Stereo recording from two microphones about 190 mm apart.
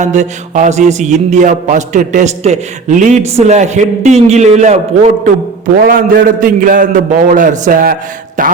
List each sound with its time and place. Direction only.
0.0 s mantra: 40° right (ahead or behind)
5.8 s a man's voice: 45° right (ahead or behind)